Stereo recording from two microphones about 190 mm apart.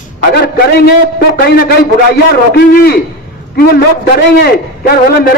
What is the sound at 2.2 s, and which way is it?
A man's voice, 55° left (ahead or behind).